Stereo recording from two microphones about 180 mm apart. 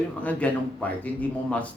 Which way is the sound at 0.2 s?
10° left (ahead or behind).